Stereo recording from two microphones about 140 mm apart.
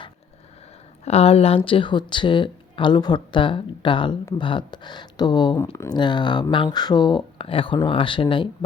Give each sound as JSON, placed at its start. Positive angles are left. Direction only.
{"t": 1.0, "sound": "speech", "side_deg": 45}
{"t": 5.7, "sound": "speech", "side_deg": 20}
{"t": 6.0, "sound": "speech", "side_deg": 35}